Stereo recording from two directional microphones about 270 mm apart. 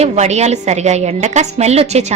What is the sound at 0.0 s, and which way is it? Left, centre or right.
A woman's voice, right.